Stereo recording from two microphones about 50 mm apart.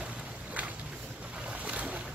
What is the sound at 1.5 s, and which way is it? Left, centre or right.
Boat, right.